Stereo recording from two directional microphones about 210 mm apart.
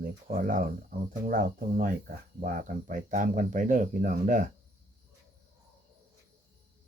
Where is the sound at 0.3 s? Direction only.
40° right (ahead or behind).